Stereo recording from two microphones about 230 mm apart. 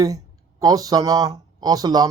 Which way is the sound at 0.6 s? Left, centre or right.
Centre.